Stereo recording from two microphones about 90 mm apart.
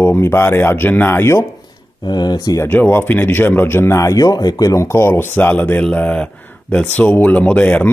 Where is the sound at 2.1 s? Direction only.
50° left (ahead or behind).